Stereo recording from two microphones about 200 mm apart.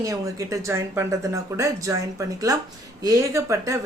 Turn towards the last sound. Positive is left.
turn(degrees=-15)  # may be behind; listen again after turning